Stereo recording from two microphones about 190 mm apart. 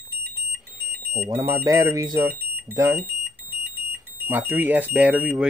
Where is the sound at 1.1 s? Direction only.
15° right (ahead or behind).